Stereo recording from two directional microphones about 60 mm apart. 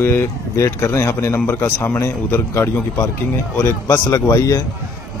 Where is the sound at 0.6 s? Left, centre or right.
Left.